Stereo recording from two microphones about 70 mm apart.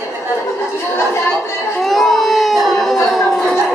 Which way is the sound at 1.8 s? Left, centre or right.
Centre.